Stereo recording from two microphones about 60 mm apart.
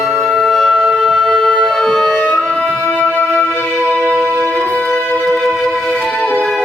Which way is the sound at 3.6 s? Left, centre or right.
Right.